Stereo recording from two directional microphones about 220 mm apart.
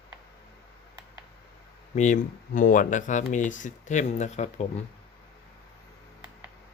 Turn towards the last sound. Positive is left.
turn(degrees=30)  # may be behind; listen again after turning